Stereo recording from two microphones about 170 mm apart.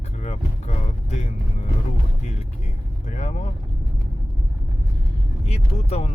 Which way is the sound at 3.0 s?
40° left (ahead or behind).